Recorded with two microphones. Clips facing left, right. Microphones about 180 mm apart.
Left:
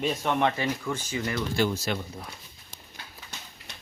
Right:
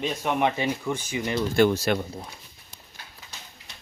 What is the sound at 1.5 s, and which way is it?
Speech, 65° right (ahead or behind).